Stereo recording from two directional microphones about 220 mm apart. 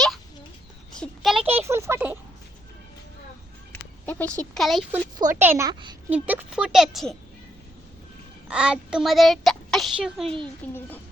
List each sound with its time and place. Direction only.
0.9 s a sound: centre (ahead or behind)
1.4 s a sound: 25° right (ahead or behind)
1.6 s a woman's voice: 10° right (ahead or behind)
4.0 s a child's voice: 5° left (ahead or behind)
5.4 s a woman's voice: 10° right (ahead or behind)
6.1 s a child's voice: 5° right (ahead or behind)
8.4 s a child's voice: 5° right (ahead or behind)